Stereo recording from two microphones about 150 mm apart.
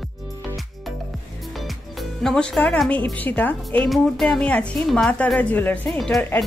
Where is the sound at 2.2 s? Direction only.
5° left (ahead or behind).